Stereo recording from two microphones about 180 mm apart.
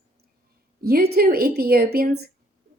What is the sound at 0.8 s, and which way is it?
Speech, 60° right (ahead or behind).